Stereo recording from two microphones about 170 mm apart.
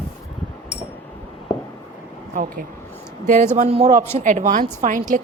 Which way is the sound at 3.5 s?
40° right (ahead or behind).